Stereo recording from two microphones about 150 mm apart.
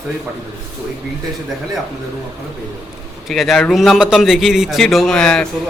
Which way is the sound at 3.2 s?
Centre (ahead or behind).